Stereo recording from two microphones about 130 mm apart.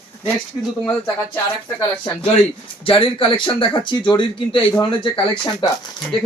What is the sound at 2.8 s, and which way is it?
Speech, 45° left (ahead or behind).